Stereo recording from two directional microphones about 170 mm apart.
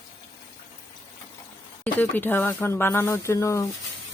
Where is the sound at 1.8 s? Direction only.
10° left (ahead or behind).